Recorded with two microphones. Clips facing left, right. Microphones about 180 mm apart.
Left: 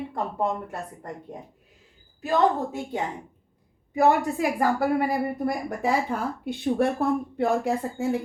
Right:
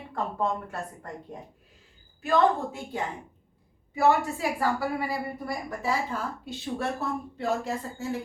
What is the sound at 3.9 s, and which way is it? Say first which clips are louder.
A woman's voice: left 3 dB; 50° left (ahead or behind).